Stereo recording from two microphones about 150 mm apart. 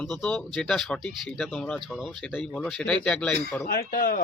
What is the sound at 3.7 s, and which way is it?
Speech, 75° left (ahead or behind).